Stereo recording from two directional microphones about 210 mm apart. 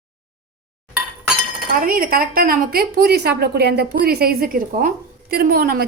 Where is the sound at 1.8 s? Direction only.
45° right (ahead or behind).